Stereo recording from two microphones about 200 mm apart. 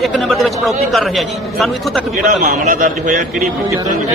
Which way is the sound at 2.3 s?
40° right (ahead or behind).